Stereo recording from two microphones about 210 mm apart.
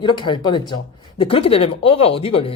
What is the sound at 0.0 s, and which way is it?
Speech, 20° left (ahead or behind).